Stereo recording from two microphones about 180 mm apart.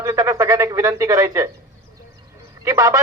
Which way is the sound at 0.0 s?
15° right (ahead or behind).